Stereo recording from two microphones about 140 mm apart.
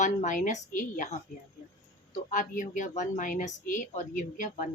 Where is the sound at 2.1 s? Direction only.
65° left (ahead or behind).